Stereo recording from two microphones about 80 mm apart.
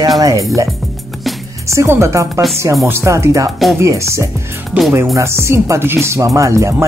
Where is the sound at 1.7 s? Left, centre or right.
Right.